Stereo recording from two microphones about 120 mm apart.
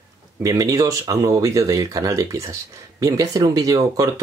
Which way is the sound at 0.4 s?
30° right (ahead or behind).